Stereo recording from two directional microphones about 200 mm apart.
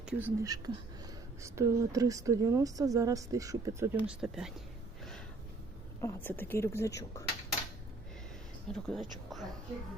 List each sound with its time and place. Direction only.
0.0 s speech: 5° right (ahead or behind)
6.0 s speech: 10° left (ahead or behind)
8.7 s speech: centre (ahead or behind)